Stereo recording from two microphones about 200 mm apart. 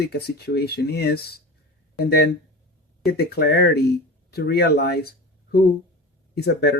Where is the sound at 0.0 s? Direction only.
55° left (ahead or behind).